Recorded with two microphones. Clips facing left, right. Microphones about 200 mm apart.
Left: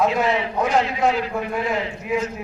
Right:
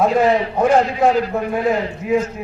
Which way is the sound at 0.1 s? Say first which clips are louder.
Right 6 dB; 40° right (ahead or behind).